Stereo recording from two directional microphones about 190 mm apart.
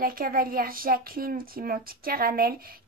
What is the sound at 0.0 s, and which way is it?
Speech, 50° right (ahead or behind).